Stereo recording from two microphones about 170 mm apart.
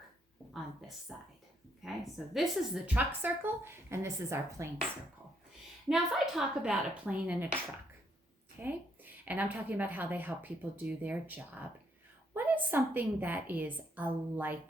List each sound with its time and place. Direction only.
1.1 s a woman's voice: 5° right (ahead or behind)
5.9 s a woman's voice: centre (ahead or behind)
8.6 s speech: 10° right (ahead or behind)